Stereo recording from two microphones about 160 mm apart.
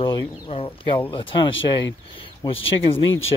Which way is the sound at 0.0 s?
30° left (ahead or behind).